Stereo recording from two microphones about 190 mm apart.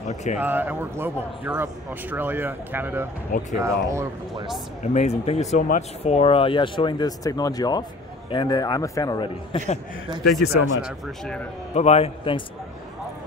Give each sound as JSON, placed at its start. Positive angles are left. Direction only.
{"t": 0.1, "sound": "a man's voice", "side_deg": 35}
{"t": 0.4, "sound": "a man's voice", "side_deg": -10}
{"t": 4.9, "sound": "a man's voice", "side_deg": 35}
{"t": 10.4, "sound": "speech", "side_deg": 55}
{"t": 11.7, "sound": "a man's voice", "side_deg": 35}